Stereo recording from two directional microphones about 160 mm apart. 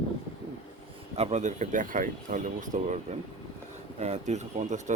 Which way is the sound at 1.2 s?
45° right (ahead or behind).